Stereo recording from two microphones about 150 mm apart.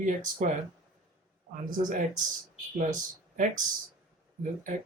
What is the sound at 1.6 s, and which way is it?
Speech, 65° right (ahead or behind).